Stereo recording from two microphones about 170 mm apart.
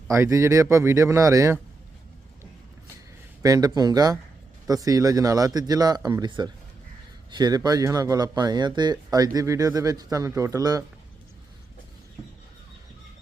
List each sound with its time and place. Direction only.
0.1 s speech: 15° right (ahead or behind)
3.4 s speech: 20° right (ahead or behind)